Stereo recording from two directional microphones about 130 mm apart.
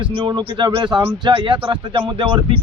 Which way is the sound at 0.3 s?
40° right (ahead or behind).